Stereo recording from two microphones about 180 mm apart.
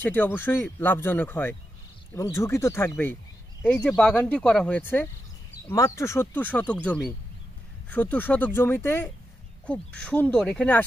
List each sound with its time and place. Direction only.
0.0 s speech: 10° left (ahead or behind)